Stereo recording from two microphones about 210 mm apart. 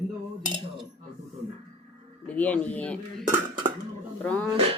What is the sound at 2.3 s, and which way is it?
Speech, 5° left (ahead or behind).